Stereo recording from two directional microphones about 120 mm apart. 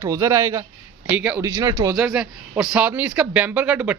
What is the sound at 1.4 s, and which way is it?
Speech, 25° right (ahead or behind).